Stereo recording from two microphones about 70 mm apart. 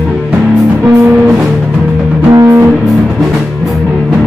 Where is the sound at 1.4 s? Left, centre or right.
Centre.